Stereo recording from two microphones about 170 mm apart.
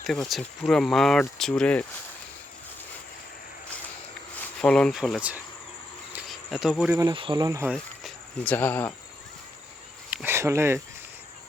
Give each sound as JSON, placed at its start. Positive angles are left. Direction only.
{"t": 0.0, "sound": "speech", "side_deg": 0}
{"t": 4.6, "sound": "speech", "side_deg": 5}
{"t": 6.1, "sound": "cricket", "side_deg": 0}
{"t": 6.9, "sound": "speech", "side_deg": -20}
{"t": 8.4, "sound": "speech", "side_deg": 10}
{"t": 10.1, "sound": "cricket", "side_deg": -10}